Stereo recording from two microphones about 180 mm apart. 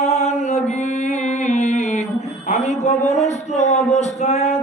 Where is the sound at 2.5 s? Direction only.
40° left (ahead or behind).